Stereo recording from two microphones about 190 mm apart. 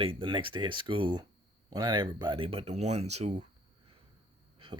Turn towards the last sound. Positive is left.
turn(degrees=-25)  # may be behind; listen again after turning